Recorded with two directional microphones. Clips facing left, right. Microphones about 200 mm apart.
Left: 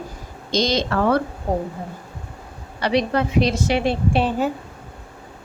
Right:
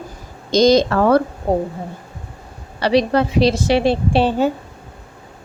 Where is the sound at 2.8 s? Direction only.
35° right (ahead or behind).